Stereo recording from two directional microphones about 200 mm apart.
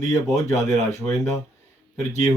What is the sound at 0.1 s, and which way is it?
Speech, 15° left (ahead or behind).